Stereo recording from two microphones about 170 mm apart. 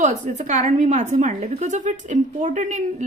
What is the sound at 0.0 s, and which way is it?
A woman's voice, 45° right (ahead or behind).